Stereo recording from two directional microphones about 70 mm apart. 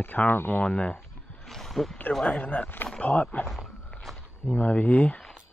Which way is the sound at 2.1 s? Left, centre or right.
Centre.